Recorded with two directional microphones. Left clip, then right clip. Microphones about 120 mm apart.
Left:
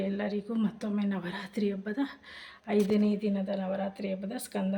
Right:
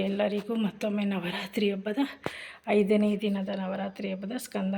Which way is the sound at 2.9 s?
15° right (ahead or behind).